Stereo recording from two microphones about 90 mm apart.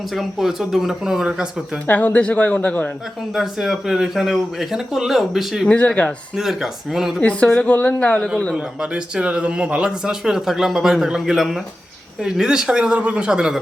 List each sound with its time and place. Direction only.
0.1 s speech: centre (ahead or behind)
1.9 s a woman's voice: 20° left (ahead or behind)
3.3 s speech: 5° right (ahead or behind)
5.6 s a woman's voice: 15° left (ahead or behind)
6.3 s speech: 5° right (ahead or behind)
7.2 s a woman's voice: 15° left (ahead or behind)
8.5 s speech: 10° right (ahead or behind)